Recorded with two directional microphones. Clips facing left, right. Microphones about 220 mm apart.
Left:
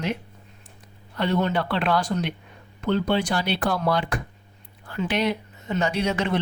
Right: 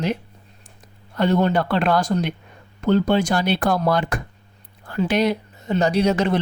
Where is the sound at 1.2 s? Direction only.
40° right (ahead or behind).